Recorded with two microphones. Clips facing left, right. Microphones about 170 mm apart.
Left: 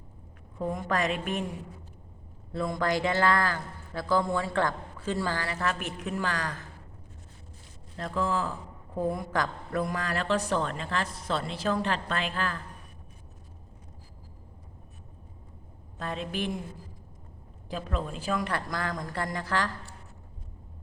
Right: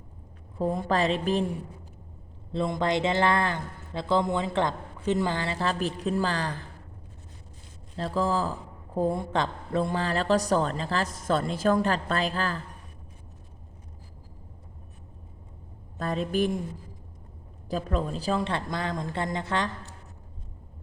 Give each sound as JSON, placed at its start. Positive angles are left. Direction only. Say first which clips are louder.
{"t": 0.6, "sound": "a woman's voice", "louder": "right 4 dB", "side_deg": -30}
{"t": 2.5, "sound": "speech", "louder": "right 2 dB", "side_deg": -25}
{"t": 7.9, "sound": "a woman's voice", "louder": "right 3 dB", "side_deg": -30}
{"t": 16.0, "sound": "a woman's voice", "louder": "right 6 dB", "side_deg": -40}
{"t": 17.7, "sound": "speech", "louder": "right 5 dB", "side_deg": -40}